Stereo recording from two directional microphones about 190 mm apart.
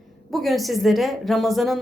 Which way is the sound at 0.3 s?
Centre (ahead or behind).